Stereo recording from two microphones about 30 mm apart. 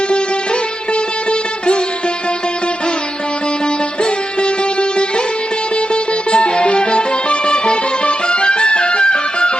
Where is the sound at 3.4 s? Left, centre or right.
Left.